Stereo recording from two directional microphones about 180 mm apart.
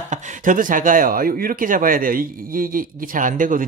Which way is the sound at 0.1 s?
45° right (ahead or behind).